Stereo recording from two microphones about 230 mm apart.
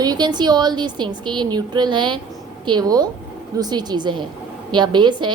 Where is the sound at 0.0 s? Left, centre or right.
Centre.